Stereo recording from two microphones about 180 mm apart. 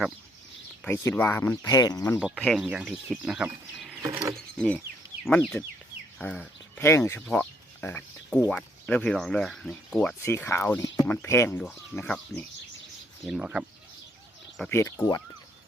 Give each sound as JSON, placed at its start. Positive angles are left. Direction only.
{"t": 0.9, "sound": "speech", "side_deg": 10}
{"t": 2.1, "sound": "speech", "side_deg": 0}
{"t": 4.4, "sound": "a sound", "side_deg": 5}
{"t": 5.2, "sound": "speech", "side_deg": 0}
{"t": 10.2, "sound": "speech", "side_deg": 15}
{"t": 13.2, "sound": "speech", "side_deg": -5}
{"t": 14.7, "sound": "speech", "side_deg": 15}